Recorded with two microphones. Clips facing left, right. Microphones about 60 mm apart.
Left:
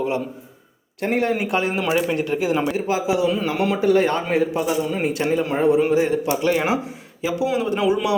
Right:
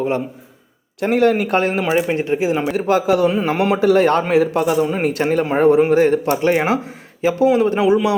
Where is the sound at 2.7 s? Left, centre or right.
Right.